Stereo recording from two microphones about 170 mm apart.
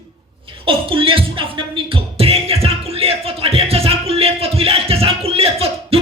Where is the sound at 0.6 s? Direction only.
30° right (ahead or behind).